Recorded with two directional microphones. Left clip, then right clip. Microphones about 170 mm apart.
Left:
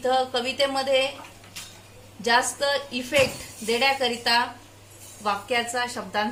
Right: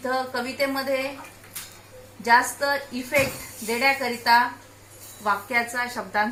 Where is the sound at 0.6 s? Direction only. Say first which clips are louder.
Left 1 dB; 60° left (ahead or behind).